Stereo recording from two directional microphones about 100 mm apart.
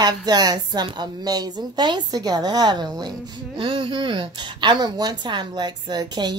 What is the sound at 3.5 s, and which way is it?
A woman's voice, 60° right (ahead or behind).